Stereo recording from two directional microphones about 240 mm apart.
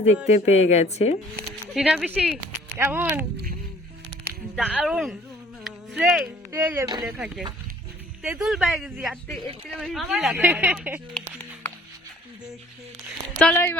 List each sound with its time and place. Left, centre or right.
0.3 s speech: left
1.7 s speech: centre
4.8 s speech: centre
13.4 s speech: centre